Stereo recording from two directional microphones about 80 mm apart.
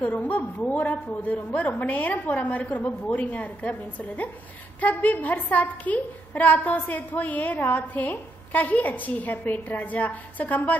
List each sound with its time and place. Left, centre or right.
0.0 s a woman's voice: left
4.7 s a woman's voice: centre